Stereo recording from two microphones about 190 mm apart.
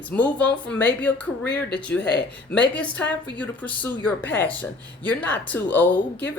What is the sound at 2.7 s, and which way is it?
A woman's voice, 10° left (ahead or behind).